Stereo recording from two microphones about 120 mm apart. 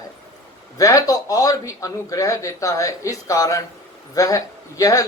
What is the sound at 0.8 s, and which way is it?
Speech, 30° left (ahead or behind).